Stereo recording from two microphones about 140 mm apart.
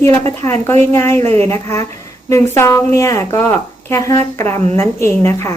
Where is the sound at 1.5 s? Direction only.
20° left (ahead or behind).